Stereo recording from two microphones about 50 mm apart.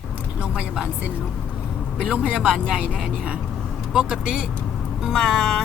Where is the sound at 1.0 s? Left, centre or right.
Right.